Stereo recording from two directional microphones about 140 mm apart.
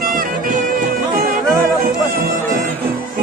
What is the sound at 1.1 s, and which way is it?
Music, 90° right.